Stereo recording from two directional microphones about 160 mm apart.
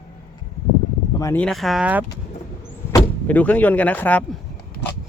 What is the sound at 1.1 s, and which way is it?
Speech, 20° left (ahead or behind).